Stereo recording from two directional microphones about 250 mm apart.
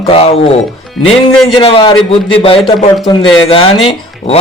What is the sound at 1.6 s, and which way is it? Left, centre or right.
Speech, centre.